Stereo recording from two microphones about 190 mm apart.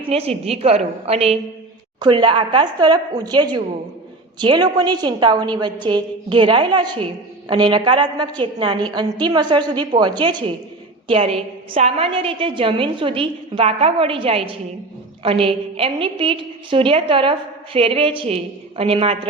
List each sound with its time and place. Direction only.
0.0 s a woman's voice: 30° right (ahead or behind)